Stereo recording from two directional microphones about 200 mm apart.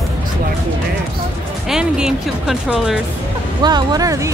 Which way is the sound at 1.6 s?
5° right (ahead or behind).